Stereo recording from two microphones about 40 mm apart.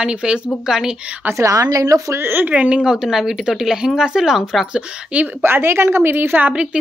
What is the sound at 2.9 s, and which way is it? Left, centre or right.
Speech, centre.